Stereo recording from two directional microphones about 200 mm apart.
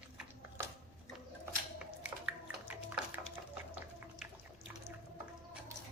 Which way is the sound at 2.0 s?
5° right (ahead or behind).